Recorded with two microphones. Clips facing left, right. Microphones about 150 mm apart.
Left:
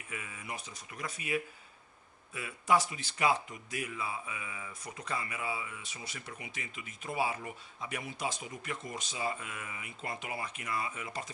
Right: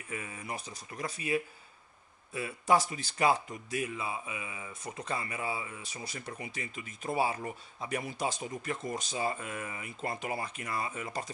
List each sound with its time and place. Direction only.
0.1 s speech: 35° right (ahead or behind)
3.8 s speech: 25° right (ahead or behind)